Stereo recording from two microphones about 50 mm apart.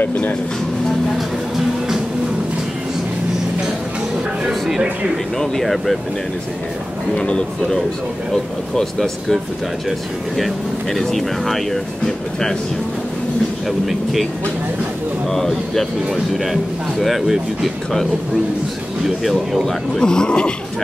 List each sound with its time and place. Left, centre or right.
0.1 s speech: left
1.1 s music: centre
4.5 s a sound: centre
5.4 s speech: centre
7.2 s speech: centre
8.7 s speech: centre
13.7 s speech: centre
15.2 s speech: centre
19.0 s speech: centre